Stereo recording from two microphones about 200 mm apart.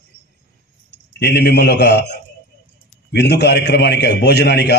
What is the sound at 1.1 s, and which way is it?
A man's voice, 55° left (ahead or behind).